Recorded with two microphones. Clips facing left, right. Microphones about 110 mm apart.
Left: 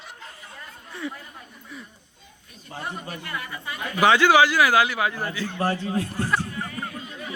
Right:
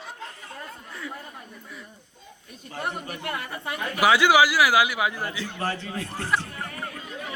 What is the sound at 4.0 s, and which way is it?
A man's voice, 10° right (ahead or behind).